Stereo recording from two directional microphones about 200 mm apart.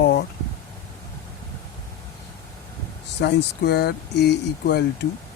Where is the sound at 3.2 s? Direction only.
55° left (ahead or behind).